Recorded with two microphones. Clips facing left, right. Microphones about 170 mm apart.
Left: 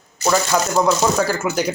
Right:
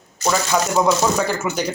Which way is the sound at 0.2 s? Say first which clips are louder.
Left 1 dB; 10° left (ahead or behind).